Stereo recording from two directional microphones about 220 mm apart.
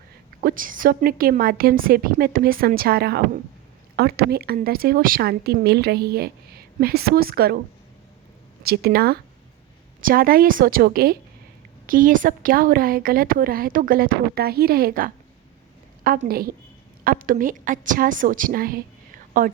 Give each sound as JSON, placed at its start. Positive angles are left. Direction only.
{"t": 0.4, "sound": "a woman's voice", "side_deg": -40}
{"t": 8.6, "sound": "a woman's voice", "side_deg": -45}